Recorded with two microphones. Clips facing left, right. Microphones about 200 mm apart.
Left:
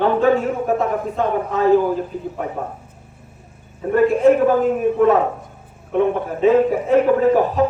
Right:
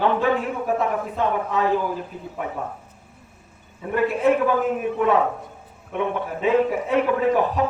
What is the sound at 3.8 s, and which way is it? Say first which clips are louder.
Speech: left 6 dB; 40° left (ahead or behind).